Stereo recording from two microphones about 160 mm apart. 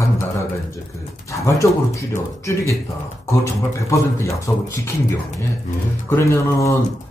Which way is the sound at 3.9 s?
20° left (ahead or behind).